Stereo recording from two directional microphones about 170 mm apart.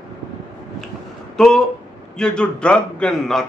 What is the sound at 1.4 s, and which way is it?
A man's voice, centre (ahead or behind).